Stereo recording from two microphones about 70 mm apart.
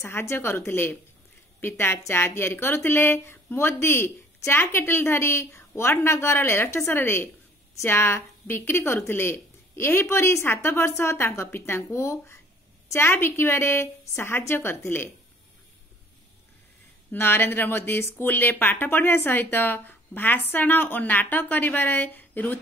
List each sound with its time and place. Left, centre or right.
0.0 s a woman's voice: left
17.1 s speech: left